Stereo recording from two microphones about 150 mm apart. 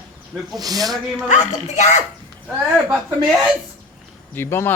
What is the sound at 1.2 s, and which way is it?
Speech, 55° left (ahead or behind).